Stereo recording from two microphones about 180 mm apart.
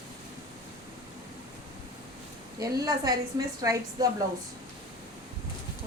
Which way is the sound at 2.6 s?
20° right (ahead or behind).